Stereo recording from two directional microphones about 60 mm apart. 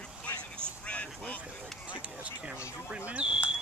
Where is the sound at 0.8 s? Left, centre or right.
Left.